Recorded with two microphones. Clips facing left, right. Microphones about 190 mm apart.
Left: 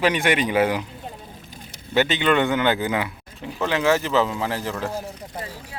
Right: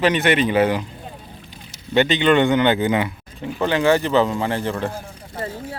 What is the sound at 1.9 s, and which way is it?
Speech, 5° left (ahead or behind).